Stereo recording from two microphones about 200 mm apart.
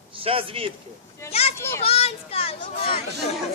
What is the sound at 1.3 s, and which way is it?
A child's voice, 30° left (ahead or behind).